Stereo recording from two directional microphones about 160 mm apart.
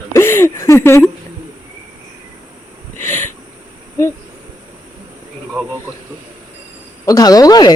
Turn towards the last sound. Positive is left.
turn(degrees=25)  # may be behind; listen again after turning